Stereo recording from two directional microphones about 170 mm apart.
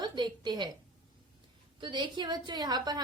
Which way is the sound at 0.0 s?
25° right (ahead or behind).